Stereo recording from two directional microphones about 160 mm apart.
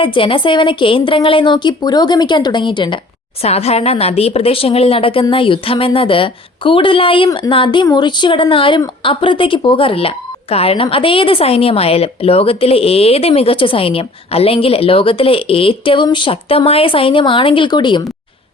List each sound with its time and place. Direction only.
0.0 s speech: 35° left (ahead or behind)
3.4 s speech: 40° left (ahead or behind)